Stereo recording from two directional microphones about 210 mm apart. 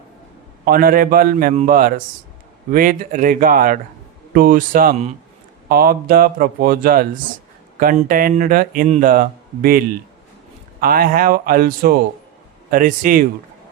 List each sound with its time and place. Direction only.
0.6 s speech: 45° right (ahead or behind)